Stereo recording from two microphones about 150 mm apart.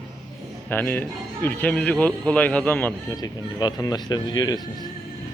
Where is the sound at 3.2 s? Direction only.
25° left (ahead or behind).